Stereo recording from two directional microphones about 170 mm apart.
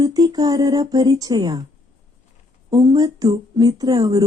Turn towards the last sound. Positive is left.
turn(degrees=-25)  # may be behind; listen again after turning